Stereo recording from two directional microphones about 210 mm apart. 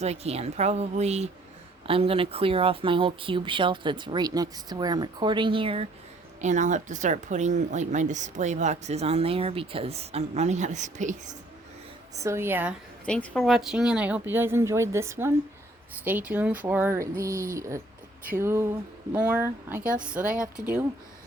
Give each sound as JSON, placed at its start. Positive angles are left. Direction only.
{"t": 0.0, "sound": "speech", "side_deg": -30}
{"t": 12.2, "sound": "speech", "side_deg": -10}
{"t": 13.1, "sound": "speech", "side_deg": 5}